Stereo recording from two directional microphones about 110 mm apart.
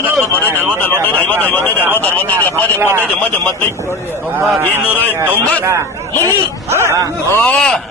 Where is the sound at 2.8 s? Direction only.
20° right (ahead or behind).